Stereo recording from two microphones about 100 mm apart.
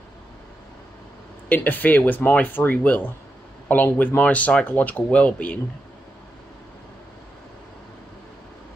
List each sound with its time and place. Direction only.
1.5 s speech: 20° left (ahead or behind)